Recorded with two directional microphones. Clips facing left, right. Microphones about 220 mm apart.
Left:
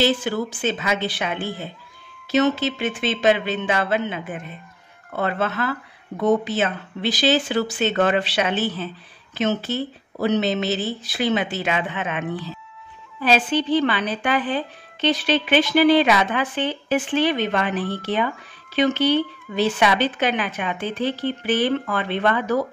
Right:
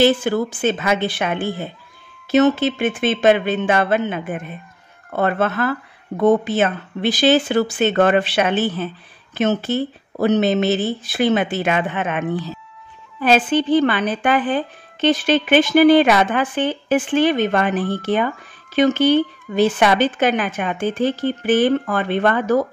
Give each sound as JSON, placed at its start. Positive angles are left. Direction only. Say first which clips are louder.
{"t": 0.0, "sound": "speech", "louder": "right 5 dB", "side_deg": -55}